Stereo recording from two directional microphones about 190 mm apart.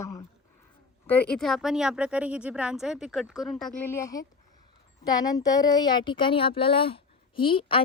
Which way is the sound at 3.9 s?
15° left (ahead or behind).